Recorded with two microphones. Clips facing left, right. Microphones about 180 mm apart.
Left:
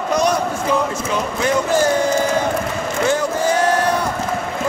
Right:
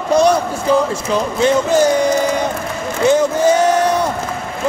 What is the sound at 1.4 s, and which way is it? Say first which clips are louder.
Speech: right 4 dB; 20° right (ahead or behind).